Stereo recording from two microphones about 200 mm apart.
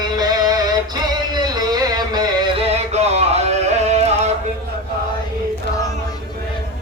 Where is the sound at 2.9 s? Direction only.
35° right (ahead or behind).